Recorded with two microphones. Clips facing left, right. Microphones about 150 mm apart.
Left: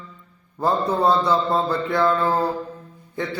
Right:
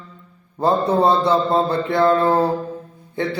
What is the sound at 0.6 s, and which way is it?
Mantra, 25° right (ahead or behind).